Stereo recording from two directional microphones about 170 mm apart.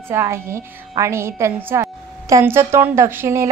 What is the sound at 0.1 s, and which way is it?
A woman's voice, 15° right (ahead or behind).